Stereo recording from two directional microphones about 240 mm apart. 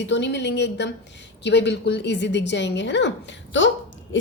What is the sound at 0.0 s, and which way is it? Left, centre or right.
A woman's voice, left.